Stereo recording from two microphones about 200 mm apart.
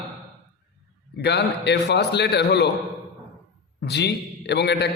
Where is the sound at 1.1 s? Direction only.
55° left (ahead or behind).